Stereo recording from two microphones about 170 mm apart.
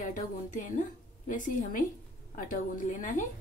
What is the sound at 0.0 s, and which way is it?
A woman's voice, 50° left (ahead or behind).